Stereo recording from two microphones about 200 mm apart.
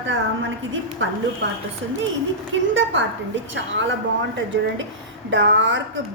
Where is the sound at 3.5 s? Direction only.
65° right (ahead or behind).